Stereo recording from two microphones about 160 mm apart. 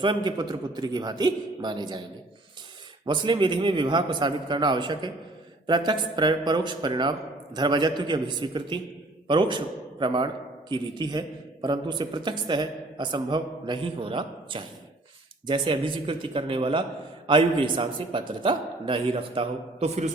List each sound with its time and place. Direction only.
0.0 s a man's voice: 30° right (ahead or behind)
3.1 s a man's voice: 30° right (ahead or behind)